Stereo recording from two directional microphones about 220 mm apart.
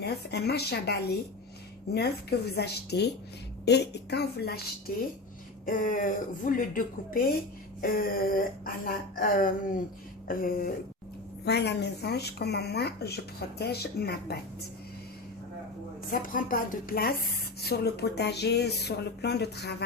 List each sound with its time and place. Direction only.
0.0 s speech: 50° left (ahead or behind)
5.6 s speech: 35° left (ahead or behind)
16.2 s speech: 40° left (ahead or behind)